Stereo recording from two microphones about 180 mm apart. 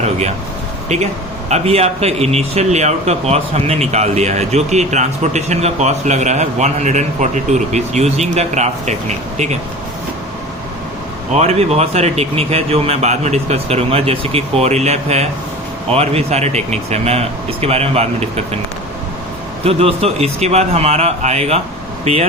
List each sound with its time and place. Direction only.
1.5 s a man's voice: 35° right (ahead or behind)
11.3 s a man's voice: 35° right (ahead or behind)
19.6 s a man's voice: 35° right (ahead or behind)